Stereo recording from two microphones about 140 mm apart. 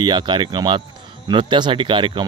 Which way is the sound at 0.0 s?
35° right (ahead or behind).